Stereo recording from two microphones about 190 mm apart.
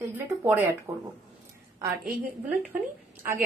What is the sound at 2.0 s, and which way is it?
Speech, 45° right (ahead or behind).